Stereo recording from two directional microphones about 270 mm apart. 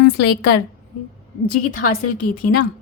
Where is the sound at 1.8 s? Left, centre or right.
Left.